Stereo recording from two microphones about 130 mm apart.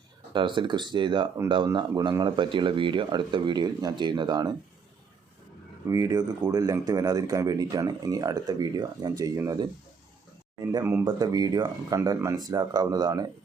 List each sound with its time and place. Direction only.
0.3 s speech: 40° right (ahead or behind)
5.9 s speech: 25° right (ahead or behind)
11.0 s speech: 30° right (ahead or behind)